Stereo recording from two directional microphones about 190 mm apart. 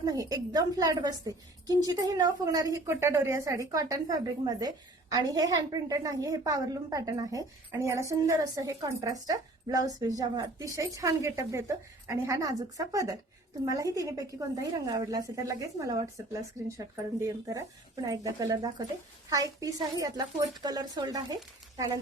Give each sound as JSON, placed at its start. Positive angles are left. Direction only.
{"t": 0.0, "sound": "a woman's voice", "side_deg": -20}